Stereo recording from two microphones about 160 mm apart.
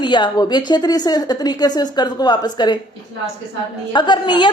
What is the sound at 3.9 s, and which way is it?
Speech, 30° left (ahead or behind).